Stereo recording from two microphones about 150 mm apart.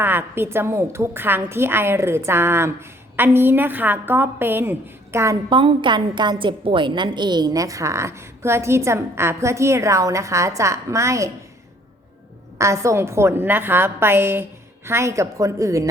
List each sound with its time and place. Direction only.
0.0 s a woman's voice: 15° right (ahead or behind)
5.5 s a woman's voice: 35° right (ahead or behind)
12.5 s a woman's voice: 20° right (ahead or behind)